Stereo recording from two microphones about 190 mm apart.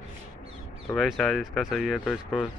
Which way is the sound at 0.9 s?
Centre (ahead or behind).